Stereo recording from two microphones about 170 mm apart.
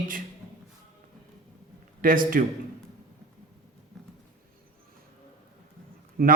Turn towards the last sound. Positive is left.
turn(degrees=-55)  # may be behind; listen again after turning